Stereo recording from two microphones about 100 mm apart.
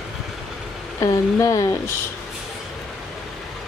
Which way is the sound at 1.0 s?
35° left (ahead or behind).